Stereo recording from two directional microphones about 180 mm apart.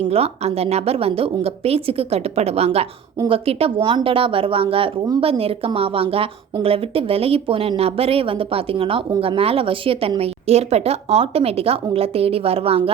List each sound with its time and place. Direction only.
0.1 s speech: 35° right (ahead or behind)